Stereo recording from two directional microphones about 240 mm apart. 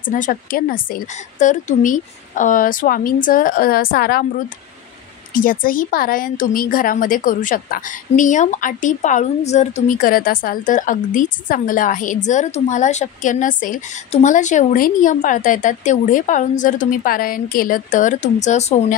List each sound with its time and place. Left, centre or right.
0.1 s speech: left
5.3 s speech: left